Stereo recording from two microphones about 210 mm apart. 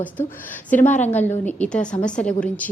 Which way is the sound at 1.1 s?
10° left (ahead or behind).